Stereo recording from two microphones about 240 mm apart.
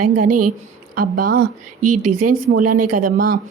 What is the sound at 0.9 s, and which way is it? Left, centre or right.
Speech, right.